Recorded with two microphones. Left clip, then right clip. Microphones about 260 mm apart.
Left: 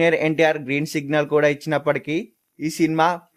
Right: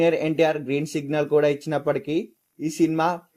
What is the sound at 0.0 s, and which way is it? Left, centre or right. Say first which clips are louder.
Speech: left 3 dB; left.